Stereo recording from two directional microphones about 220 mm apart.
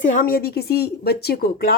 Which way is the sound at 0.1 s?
40° left (ahead or behind).